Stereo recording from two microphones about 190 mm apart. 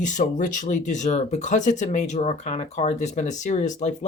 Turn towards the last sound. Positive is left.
turn(degrees=40)  # may be behind; listen again after turning